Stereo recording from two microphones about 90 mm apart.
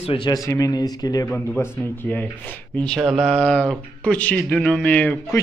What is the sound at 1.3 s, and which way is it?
Speech, 20° left (ahead or behind).